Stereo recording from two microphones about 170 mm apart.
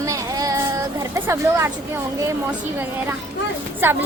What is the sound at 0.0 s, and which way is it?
Child singing, 20° right (ahead or behind).